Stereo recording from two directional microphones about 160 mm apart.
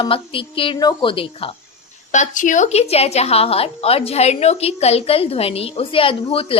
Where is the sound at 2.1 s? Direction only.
50° left (ahead or behind).